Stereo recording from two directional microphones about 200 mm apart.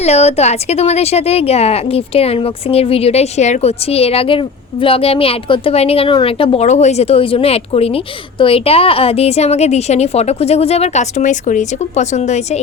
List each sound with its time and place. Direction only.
0.0 s speech: 30° left (ahead or behind)